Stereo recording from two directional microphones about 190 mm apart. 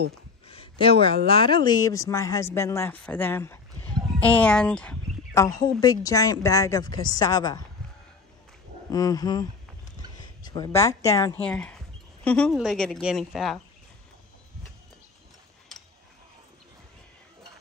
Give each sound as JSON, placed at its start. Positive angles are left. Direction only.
{"t": 0.5, "sound": "speech", "side_deg": 30}
{"t": 8.9, "sound": "speech", "side_deg": 20}
{"t": 11.4, "sound": "a woman's voice", "side_deg": 5}